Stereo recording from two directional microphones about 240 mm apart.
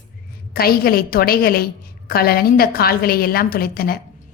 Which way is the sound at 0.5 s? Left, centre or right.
Left.